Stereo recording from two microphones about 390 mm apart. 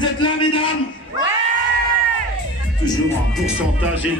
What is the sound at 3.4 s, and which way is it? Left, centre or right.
Speech, centre.